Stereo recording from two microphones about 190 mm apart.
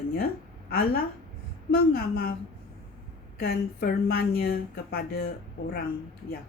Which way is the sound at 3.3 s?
55° left (ahead or behind).